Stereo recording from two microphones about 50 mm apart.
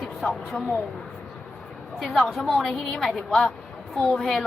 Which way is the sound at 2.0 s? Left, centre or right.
Centre.